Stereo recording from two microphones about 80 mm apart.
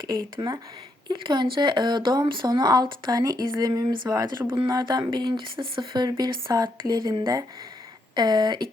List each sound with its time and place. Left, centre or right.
0.1 s speech: right
1.2 s speech: right
2.5 s speech: right